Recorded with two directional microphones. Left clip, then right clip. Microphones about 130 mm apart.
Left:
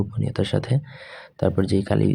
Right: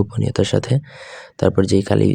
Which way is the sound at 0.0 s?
40° right (ahead or behind).